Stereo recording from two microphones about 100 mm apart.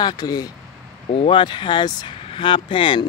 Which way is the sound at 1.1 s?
85° left.